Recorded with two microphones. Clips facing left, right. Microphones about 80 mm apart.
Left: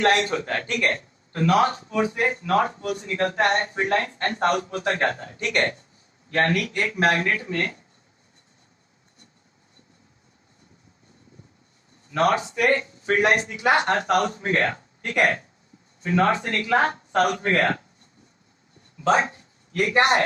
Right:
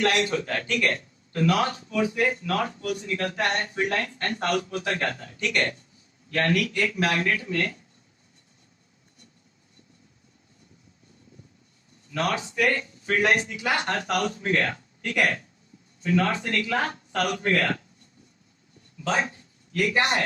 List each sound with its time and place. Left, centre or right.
0.0 s a man's voice: left
12.0 s a man's voice: left
19.0 s speech: left